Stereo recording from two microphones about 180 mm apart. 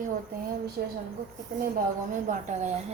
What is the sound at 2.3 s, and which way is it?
Speech, 45° right (ahead or behind).